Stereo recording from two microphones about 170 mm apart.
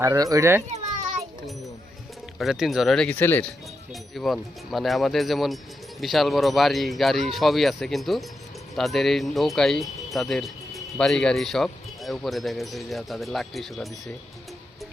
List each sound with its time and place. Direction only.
0.0 s a child's voice: 20° right (ahead or behind)
2.4 s speech: centre (ahead or behind)
4.1 s speech: centre (ahead or behind)